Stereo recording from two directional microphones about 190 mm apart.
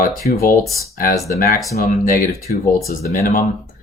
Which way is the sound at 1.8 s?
50° left (ahead or behind).